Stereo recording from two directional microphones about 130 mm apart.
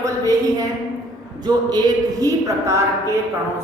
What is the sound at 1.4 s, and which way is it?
A woman's voice, 30° right (ahead or behind).